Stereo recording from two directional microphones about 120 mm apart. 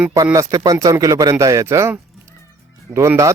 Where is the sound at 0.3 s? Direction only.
30° right (ahead or behind).